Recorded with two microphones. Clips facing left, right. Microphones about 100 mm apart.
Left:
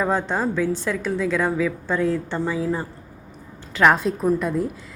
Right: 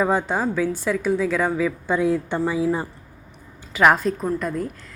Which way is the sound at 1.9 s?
15° right (ahead or behind).